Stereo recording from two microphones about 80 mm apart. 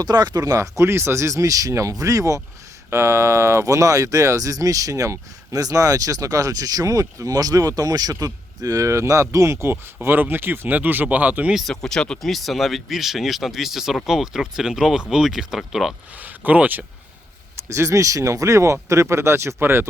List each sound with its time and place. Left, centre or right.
0.0 s speech: right
11.7 s speech: centre
16.1 s speech: right
17.6 s speech: right